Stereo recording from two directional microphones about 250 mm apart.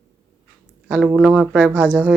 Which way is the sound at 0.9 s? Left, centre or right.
Centre.